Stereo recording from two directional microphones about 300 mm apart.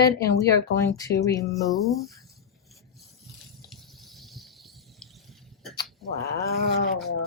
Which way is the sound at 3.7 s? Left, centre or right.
Centre.